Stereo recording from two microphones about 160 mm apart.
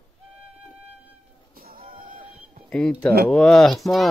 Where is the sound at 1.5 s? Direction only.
65° right (ahead or behind).